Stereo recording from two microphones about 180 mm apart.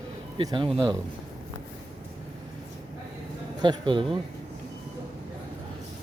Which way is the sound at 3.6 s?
25° right (ahead or behind).